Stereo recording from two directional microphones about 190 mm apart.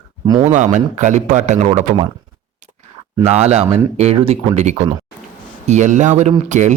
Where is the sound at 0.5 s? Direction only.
40° right (ahead or behind).